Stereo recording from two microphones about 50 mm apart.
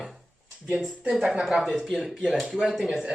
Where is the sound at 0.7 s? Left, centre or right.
Centre.